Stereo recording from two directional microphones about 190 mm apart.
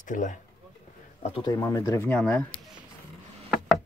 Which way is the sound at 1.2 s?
25° left (ahead or behind).